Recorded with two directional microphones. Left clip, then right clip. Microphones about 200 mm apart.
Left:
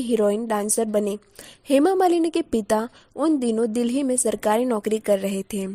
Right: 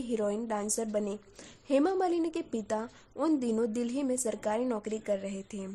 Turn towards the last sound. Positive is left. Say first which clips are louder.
# left 12 dB
turn(degrees=45)  # may be behind; listen again after turning